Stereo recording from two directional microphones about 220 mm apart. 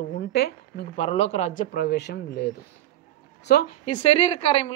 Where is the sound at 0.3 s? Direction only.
50° left (ahead or behind).